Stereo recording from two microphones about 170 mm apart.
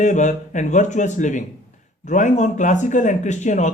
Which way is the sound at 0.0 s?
45° left (ahead or behind).